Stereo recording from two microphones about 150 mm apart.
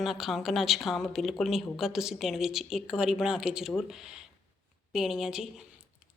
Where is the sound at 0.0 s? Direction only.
Centre (ahead or behind).